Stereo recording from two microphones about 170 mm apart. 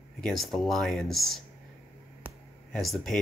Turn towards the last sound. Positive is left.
turn(degrees=0)  # may be behind; listen again after turning